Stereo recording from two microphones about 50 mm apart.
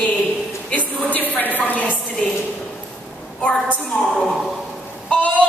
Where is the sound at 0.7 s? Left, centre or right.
Left.